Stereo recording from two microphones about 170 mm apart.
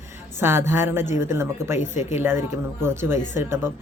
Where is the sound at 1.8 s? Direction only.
45° left (ahead or behind).